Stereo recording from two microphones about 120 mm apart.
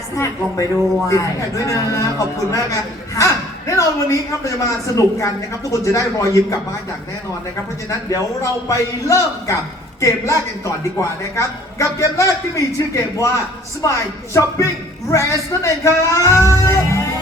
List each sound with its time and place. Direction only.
0.2 s a man's voice: 25° left (ahead or behind)
7.9 s a man's voice: 25° left (ahead or behind)
15.1 s a man's voice: 25° left (ahead or behind)